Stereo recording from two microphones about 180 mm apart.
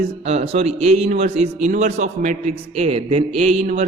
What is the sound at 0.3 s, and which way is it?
A man's voice, 35° right (ahead or behind).